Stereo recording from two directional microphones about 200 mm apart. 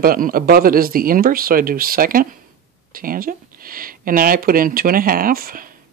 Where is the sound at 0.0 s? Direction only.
45° right (ahead or behind).